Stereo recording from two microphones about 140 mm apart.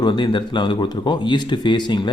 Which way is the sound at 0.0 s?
35° left (ahead or behind).